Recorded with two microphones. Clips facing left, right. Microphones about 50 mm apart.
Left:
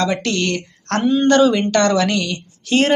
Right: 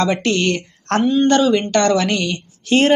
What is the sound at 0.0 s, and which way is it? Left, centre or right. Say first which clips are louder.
Speech: right 2 dB; centre.